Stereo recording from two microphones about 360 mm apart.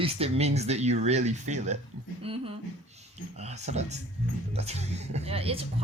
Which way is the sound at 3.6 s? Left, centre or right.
Centre.